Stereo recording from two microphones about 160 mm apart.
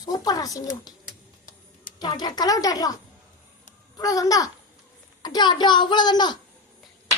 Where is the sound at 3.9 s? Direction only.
20° left (ahead or behind).